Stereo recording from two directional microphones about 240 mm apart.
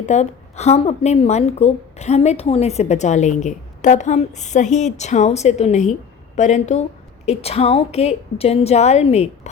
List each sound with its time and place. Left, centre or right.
0.0 s a woman's voice: left